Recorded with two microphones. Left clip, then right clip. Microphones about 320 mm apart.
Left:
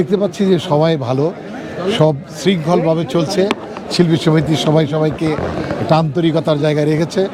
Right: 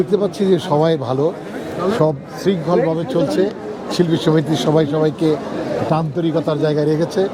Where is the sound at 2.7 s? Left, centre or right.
Left.